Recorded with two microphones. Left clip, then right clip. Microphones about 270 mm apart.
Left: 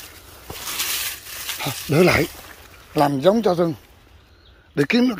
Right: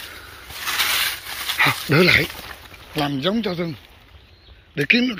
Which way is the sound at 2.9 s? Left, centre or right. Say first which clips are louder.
Left 6 dB; left.